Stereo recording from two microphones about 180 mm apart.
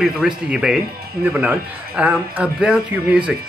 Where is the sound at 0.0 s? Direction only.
5° right (ahead or behind).